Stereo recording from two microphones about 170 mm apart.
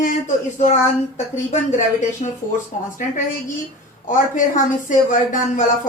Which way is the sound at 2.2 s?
40° left (ahead or behind).